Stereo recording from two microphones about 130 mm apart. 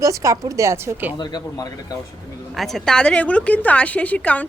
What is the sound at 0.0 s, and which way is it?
Speech, 25° right (ahead or behind).